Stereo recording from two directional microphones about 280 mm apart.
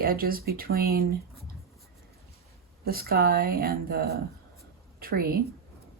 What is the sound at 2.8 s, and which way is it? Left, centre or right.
A woman's voice, right.